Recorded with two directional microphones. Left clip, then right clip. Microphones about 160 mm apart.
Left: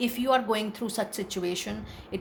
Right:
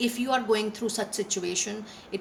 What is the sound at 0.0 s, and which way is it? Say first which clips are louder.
Speech: left 2 dB; 45° left (ahead or behind).